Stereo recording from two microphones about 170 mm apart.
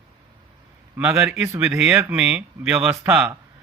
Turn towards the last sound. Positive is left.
turn(degrees=-10)  # may be behind; listen again after turning